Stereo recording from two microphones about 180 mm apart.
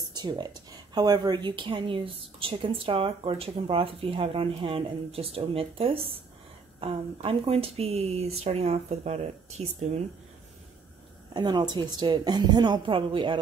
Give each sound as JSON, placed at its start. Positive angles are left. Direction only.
{"t": 0.1, "sound": "speech", "side_deg": -25}
{"t": 11.3, "sound": "speech", "side_deg": -25}